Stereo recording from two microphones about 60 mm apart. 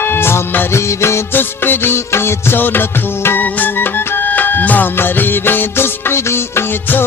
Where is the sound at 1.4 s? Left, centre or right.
Left.